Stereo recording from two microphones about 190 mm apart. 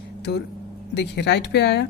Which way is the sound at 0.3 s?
65° left (ahead or behind).